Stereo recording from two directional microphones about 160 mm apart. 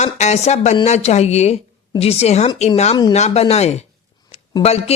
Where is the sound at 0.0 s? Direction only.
45° left (ahead or behind).